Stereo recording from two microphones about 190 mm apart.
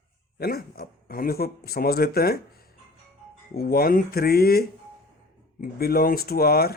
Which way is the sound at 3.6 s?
50° left (ahead or behind).